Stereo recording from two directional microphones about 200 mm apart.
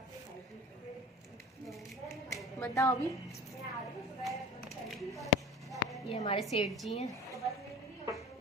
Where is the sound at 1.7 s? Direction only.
Centre (ahead or behind).